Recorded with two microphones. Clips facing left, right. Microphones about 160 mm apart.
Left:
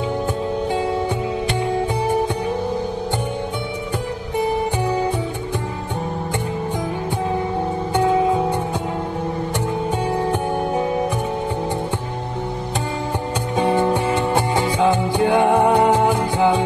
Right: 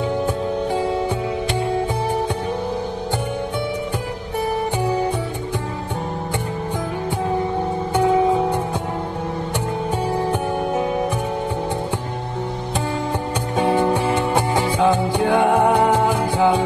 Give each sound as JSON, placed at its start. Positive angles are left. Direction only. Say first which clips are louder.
{"t": 14.1, "sound": "music", "louder": "even", "side_deg": -15}
{"t": 14.8, "sound": "music", "louder": "even", "side_deg": 15}